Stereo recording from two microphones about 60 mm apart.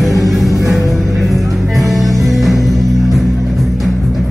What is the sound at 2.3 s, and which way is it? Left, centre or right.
Music, centre.